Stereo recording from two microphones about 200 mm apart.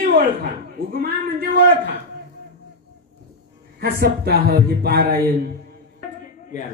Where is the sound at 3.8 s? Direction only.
50° right (ahead or behind).